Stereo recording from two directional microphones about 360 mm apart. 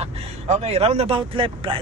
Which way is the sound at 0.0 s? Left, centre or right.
Centre.